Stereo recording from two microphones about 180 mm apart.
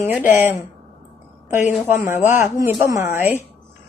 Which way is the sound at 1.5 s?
45° left (ahead or behind).